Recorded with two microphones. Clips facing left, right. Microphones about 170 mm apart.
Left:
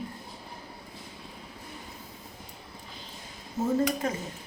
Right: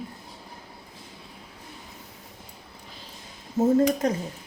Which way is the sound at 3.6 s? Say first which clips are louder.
Right 7 dB; 40° right (ahead or behind).